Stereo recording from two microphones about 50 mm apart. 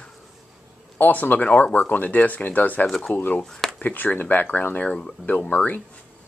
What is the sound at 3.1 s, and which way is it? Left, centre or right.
Speech, left.